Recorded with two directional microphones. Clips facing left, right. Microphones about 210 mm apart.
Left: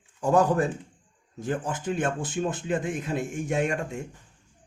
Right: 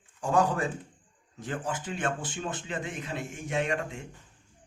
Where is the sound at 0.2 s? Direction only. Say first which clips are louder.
Left 4 dB; 40° left (ahead or behind).